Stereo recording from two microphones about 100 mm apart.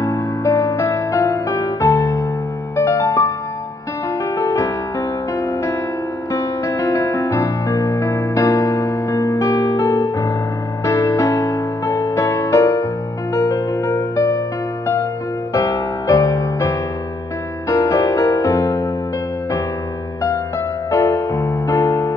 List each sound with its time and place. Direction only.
0.0 s music: 35° left (ahead or behind)
4.5 s music: 30° left (ahead or behind)
16.1 s music: 35° left (ahead or behind)
20.2 s music: 30° left (ahead or behind)